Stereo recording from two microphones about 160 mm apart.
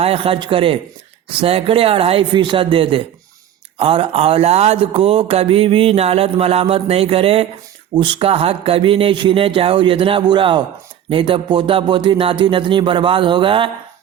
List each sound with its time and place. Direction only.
0.0 s speech: 40° right (ahead or behind)